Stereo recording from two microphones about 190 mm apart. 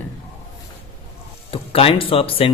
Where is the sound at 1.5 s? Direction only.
30° left (ahead or behind).